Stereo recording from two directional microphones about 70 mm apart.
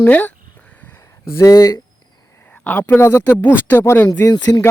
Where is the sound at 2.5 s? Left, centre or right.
Centre.